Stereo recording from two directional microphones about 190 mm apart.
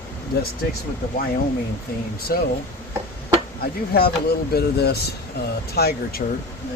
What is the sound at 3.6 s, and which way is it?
Speech, 55° left (ahead or behind).